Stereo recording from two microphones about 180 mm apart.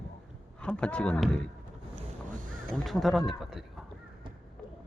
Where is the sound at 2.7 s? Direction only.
Centre (ahead or behind).